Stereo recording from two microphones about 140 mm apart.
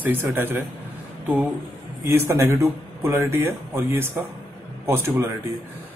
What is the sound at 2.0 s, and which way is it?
Speech, 20° right (ahead or behind).